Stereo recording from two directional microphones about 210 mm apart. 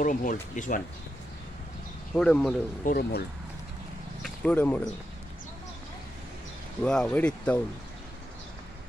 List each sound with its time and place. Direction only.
0.0 s speech: 40° left (ahead or behind)
2.1 s speech: 5° left (ahead or behind)
2.8 s speech: 45° left (ahead or behind)
4.2 s speech: 5° left (ahead or behind)
6.8 s speech: 5° left (ahead or behind)